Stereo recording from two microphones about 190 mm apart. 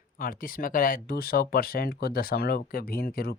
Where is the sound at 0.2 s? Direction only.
45° left (ahead or behind).